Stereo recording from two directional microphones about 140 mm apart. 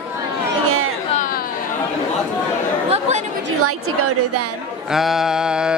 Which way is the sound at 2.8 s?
50° right (ahead or behind).